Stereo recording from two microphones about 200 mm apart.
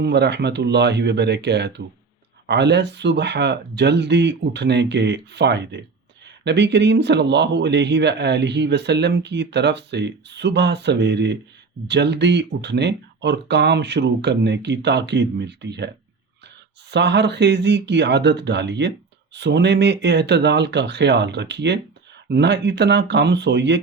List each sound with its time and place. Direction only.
0.0 s a man's voice: 55° right (ahead or behind)
16.9 s a man's voice: 60° right (ahead or behind)